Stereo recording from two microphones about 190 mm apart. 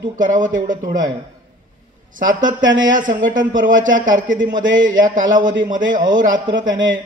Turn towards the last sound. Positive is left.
turn(degrees=-45)  # may be behind; listen again after turning